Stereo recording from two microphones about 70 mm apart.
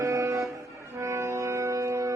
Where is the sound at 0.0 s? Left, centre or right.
Right.